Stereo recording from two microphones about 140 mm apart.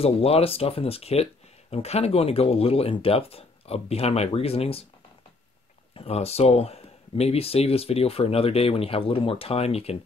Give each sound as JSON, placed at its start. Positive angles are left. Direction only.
{"t": 0.0, "sound": "speech", "side_deg": 45}
{"t": 5.9, "sound": "speech", "side_deg": 45}